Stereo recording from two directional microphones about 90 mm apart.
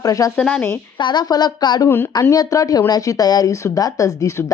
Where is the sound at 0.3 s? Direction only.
10° left (ahead or behind).